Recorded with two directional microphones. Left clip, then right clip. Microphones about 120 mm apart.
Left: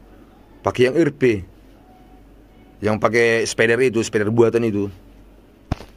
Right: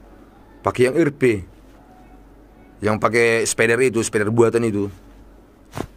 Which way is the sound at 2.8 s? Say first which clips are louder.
Even; 5° left (ahead or behind).